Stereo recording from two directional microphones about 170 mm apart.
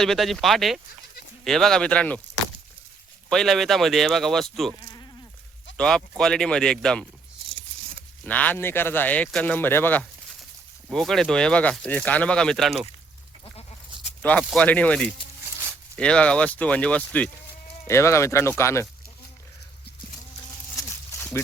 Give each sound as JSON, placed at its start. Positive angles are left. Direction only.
{"t": 0.0, "sound": "speech", "side_deg": 0}
{"t": 3.2, "sound": "speech", "side_deg": 0}
{"t": 4.8, "sound": "sheep", "side_deg": 20}
{"t": 5.7, "sound": "speech", "side_deg": 5}
{"t": 8.2, "sound": "speech", "side_deg": 10}
{"t": 13.4, "sound": "goat", "side_deg": 35}
{"t": 14.2, "sound": "speech", "side_deg": 5}